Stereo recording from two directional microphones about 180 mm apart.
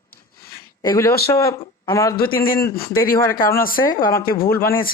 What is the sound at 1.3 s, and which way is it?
Speech, 15° left (ahead or behind).